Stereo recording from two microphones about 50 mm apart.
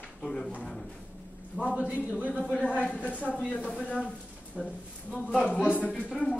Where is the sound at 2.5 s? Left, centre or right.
Left.